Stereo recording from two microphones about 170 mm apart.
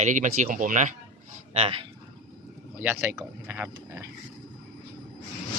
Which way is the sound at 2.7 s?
10° right (ahead or behind).